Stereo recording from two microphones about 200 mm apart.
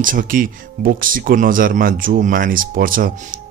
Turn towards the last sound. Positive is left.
turn(degrees=-45)  # may be behind; listen again after turning